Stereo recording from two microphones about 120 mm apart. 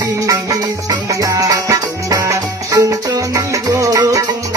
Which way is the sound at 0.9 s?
30° right (ahead or behind).